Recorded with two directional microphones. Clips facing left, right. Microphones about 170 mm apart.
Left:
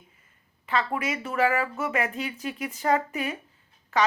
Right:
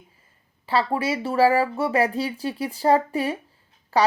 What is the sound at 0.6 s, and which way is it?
Speech, 30° right (ahead or behind).